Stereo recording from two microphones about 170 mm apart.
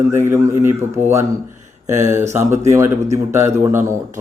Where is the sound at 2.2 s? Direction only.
40° right (ahead or behind).